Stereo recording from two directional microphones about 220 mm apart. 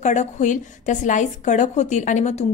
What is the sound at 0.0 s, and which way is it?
A woman's voice, 35° left (ahead or behind).